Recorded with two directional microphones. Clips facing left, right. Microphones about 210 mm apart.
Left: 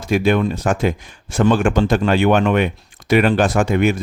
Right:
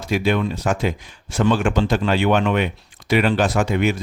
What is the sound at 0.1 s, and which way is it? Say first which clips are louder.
Speech: left 4 dB; 50° left (ahead or behind).